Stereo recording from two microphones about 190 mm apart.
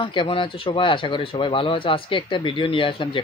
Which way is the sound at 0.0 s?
25° left (ahead or behind).